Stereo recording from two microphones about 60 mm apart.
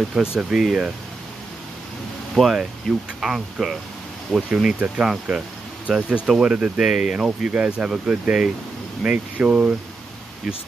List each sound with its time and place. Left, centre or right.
0.1 s speech: centre
2.4 s speech: centre
3.2 s speech: centre
7.2 s speech: right